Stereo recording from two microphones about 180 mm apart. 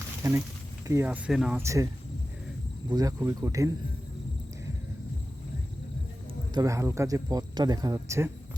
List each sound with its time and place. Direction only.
0.2 s speech: 15° right (ahead or behind)
1.5 s speech: 15° right (ahead or behind)
2.9 s speech: 20° right (ahead or behind)
6.5 s speech: 20° right (ahead or behind)